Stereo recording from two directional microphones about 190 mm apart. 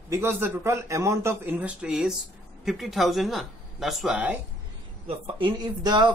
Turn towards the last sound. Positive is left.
turn(degrees=-25)  # may be behind; listen again after turning